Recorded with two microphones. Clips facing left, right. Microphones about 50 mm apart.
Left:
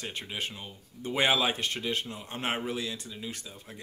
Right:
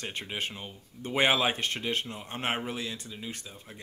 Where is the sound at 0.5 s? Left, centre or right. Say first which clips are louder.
Right 1 dB; right.